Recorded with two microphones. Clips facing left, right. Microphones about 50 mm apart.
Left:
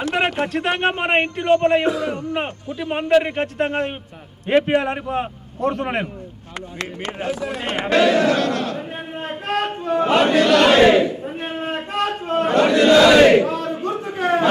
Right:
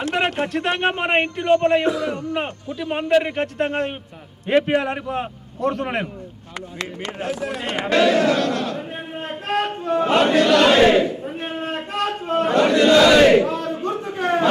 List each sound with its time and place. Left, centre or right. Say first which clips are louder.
0.4 s a man's voice: left 1 dB; centre
6.8 s speech: left 1 dB; left
7.9 s a man's voice: left 1 dB; centre
13.3 s a sound: left 1 dB; centre